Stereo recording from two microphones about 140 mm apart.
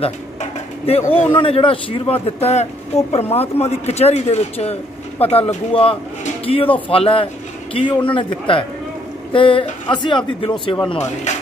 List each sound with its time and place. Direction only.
0.0 s a sound: 45° left (ahead or behind)
1.1 s a man's voice: 40° left (ahead or behind)
11.3 s music: 55° left (ahead or behind)